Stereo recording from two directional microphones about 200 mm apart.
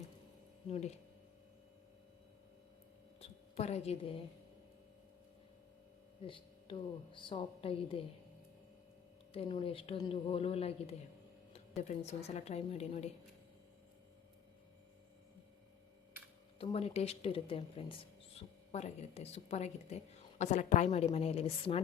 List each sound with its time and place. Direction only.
3.2 s a sound: 30° left (ahead or behind)
6.2 s a woman's voice: 25° left (ahead or behind)
9.3 s a woman's voice: 30° left (ahead or behind)
16.6 s speech: 30° left (ahead or behind)